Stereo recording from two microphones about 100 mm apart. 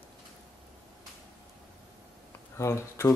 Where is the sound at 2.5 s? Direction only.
30° left (ahead or behind).